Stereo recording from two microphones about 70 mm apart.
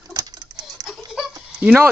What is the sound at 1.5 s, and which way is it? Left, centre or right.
Speech, right.